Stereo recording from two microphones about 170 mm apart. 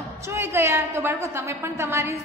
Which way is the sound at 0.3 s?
15° right (ahead or behind).